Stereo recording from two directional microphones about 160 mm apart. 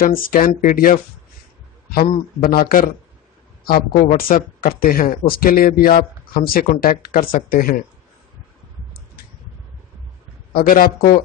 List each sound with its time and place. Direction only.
0.0 s speech: 65° left (ahead or behind)
10.5 s speech: 65° left (ahead or behind)